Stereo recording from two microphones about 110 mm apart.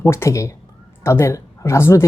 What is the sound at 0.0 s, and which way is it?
Speech, 25° left (ahead or behind).